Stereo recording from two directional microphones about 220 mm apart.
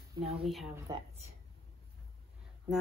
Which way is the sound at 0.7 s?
15° right (ahead or behind).